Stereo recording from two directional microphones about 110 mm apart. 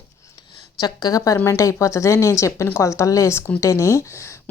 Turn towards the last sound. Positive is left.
turn(degrees=25)  # may be behind; listen again after turning